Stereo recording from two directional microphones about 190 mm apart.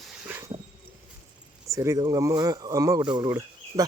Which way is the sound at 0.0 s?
10° right (ahead or behind).